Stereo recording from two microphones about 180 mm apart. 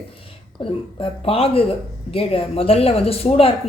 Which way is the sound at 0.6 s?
30° left (ahead or behind).